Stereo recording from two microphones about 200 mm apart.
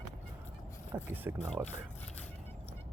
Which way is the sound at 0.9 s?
10° right (ahead or behind).